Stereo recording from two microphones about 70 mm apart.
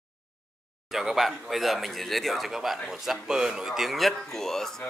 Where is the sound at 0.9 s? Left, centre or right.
Centre.